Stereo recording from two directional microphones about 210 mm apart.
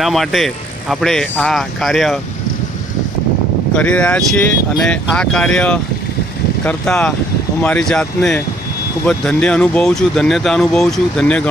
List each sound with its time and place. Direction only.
0.0 s speech: centre (ahead or behind)
3.7 s speech: 5° left (ahead or behind)